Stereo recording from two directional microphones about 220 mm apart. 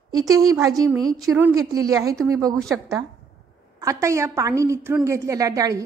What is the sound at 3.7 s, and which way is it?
A woman's voice, 15° right (ahead or behind).